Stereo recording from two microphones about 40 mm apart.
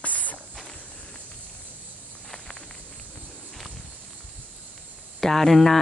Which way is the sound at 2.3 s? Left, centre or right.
Left.